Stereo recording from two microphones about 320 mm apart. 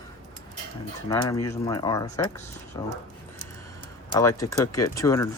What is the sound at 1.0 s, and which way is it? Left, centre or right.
Speech, centre.